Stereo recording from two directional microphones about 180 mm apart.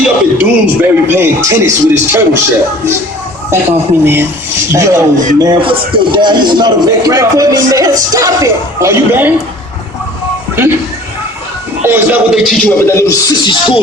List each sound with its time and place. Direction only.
0.0 s speech: 10° right (ahead or behind)
4.0 s a man's voice: 10° right (ahead or behind)
11.8 s a man's voice: 10° right (ahead or behind)
12.8 s speech: 15° left (ahead or behind)